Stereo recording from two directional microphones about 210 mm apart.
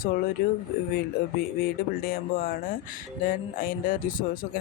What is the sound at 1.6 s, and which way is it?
Speech, 45° left (ahead or behind).